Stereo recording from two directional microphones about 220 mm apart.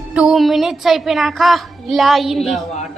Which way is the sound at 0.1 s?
5° right (ahead or behind).